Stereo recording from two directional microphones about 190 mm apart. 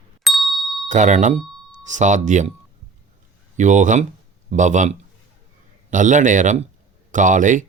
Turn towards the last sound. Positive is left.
turn(degrees=-40)  # may be behind; listen again after turning